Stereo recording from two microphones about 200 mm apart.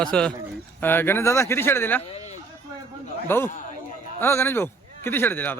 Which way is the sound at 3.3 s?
10° left (ahead or behind).